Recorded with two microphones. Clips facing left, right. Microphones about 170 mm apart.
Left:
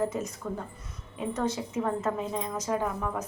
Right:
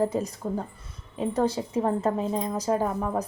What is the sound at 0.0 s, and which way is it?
A woman's voice, 30° right (ahead or behind).